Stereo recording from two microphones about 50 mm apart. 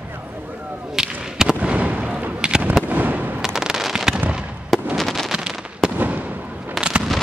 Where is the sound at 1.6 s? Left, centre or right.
Right.